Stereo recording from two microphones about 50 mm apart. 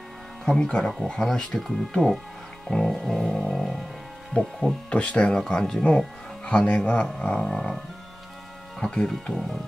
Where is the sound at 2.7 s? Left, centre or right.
Centre.